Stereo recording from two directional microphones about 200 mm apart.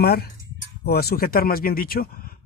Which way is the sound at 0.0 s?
50° left (ahead or behind).